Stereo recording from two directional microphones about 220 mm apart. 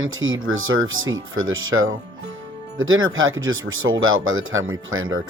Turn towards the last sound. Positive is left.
turn(degrees=-65)  # may be behind; listen again after turning